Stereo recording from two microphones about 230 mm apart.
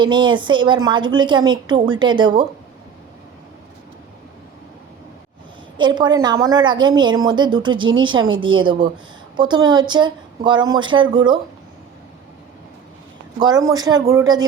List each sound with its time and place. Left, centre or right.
0.0 s a woman's voice: centre
5.7 s a woman's voice: centre
13.4 s speech: centre